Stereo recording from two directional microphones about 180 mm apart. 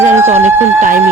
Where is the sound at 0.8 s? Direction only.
50° right (ahead or behind).